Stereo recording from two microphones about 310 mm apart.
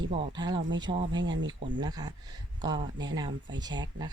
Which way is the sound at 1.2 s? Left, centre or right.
Right.